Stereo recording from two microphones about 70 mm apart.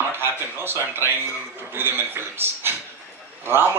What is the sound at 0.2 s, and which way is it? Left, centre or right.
A man's voice, right.